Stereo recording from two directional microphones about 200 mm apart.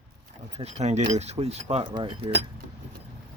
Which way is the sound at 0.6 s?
35° right (ahead or behind).